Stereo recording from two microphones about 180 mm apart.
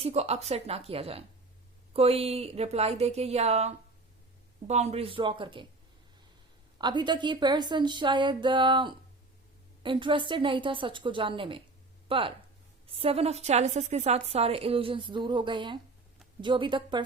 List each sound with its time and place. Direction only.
0.0 s a woman's voice: 35° right (ahead or behind)
6.7 s a woman's voice: 25° right (ahead or behind)